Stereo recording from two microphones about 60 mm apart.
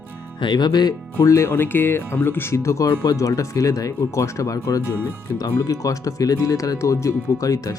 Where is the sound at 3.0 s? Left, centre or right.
Left.